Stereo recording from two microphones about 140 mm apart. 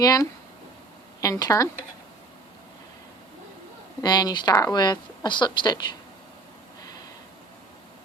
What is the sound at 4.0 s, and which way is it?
Speech, 30° left (ahead or behind).